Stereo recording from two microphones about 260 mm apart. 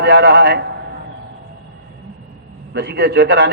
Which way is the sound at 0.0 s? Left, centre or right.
Right.